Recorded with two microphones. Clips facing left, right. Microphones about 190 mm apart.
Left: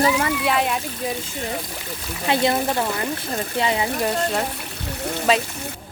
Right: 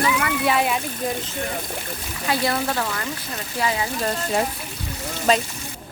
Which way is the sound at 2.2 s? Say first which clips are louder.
Left 3 dB; 25° left (ahead or behind).